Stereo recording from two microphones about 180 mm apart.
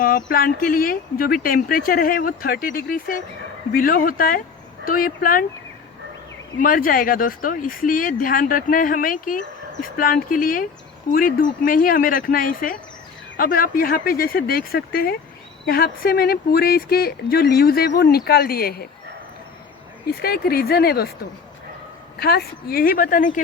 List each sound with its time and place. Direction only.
0.3 s speech: 55° left (ahead or behind)
6.6 s speech: 50° left (ahead or behind)
20.2 s speech: 55° left (ahead or behind)
22.2 s speech: 60° left (ahead or behind)